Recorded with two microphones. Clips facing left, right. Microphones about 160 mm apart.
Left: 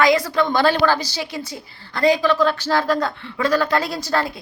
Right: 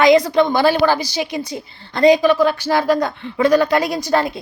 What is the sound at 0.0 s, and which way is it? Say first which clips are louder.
A woman's voice: right 5 dB; 20° right (ahead or behind).